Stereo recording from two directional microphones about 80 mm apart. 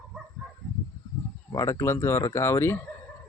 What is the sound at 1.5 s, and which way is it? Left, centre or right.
Speech, left.